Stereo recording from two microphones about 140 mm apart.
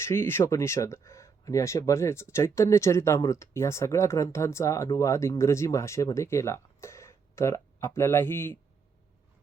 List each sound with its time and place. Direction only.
0.0 s speech: 15° left (ahead or behind)